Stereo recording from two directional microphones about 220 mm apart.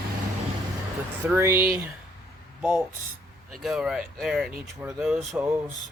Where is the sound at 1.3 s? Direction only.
10° right (ahead or behind).